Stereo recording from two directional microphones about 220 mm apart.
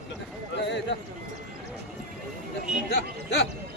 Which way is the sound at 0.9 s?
50° left (ahead or behind).